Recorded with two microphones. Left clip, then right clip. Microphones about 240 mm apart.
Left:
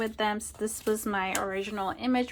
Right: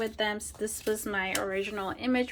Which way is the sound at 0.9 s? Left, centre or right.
Centre.